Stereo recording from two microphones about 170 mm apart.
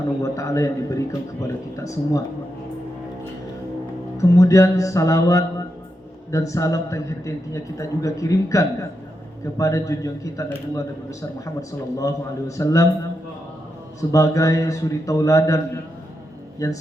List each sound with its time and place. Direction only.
0.2 s a man's voice: 15° left (ahead or behind)
4.2 s a man's voice: 20° left (ahead or behind)
14.1 s a man's voice: 20° left (ahead or behind)